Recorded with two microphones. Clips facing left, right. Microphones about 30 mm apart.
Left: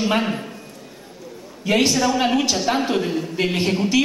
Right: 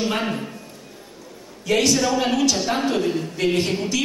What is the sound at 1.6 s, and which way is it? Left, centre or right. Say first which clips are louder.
Speech: left 2 dB; left.